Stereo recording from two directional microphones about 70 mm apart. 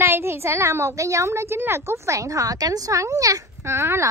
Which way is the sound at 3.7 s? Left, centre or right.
Right.